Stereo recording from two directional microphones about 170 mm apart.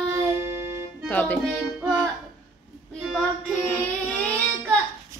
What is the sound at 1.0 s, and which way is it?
Music, 10° left (ahead or behind).